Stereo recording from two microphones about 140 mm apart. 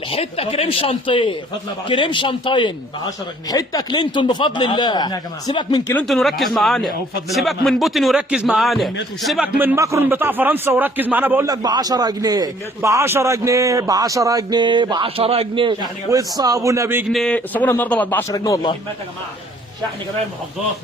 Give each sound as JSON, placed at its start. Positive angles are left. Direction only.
{"t": 0.1, "sound": "speech", "side_deg": 45}
{"t": 6.1, "sound": "a man's voice", "side_deg": 0}
{"t": 11.4, "sound": "a man's voice", "side_deg": -30}
{"t": 16.0, "sound": "a man's voice", "side_deg": -25}
{"t": 17.1, "sound": "a man's voice", "side_deg": 5}